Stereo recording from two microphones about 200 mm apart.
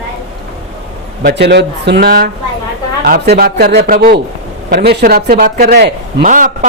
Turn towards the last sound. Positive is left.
turn(degrees=-40)  # may be behind; listen again after turning